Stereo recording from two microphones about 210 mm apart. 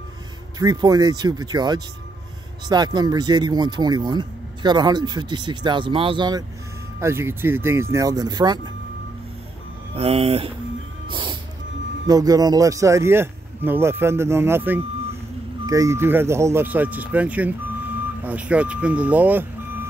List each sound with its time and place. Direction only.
0.6 s speech: 20° right (ahead or behind)
9.9 s speech: 30° right (ahead or behind)
11.1 s music: 25° right (ahead or behind)
12.1 s speech: 20° right (ahead or behind)